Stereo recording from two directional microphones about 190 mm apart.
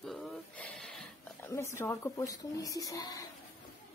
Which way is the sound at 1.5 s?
15° left (ahead or behind).